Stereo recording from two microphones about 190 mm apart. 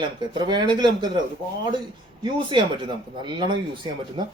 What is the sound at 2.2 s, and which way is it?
Speech, 25° right (ahead or behind).